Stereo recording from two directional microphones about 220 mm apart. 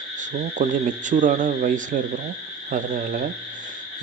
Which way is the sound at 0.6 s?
35° right (ahead or behind).